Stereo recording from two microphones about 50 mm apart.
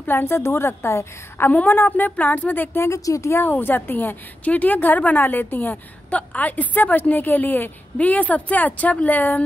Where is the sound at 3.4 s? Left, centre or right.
Left.